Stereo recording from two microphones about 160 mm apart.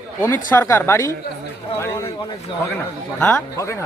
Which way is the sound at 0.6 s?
15° left (ahead or behind).